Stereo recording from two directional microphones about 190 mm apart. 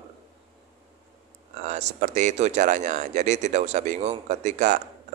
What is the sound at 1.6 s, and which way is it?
Speech, 40° right (ahead or behind).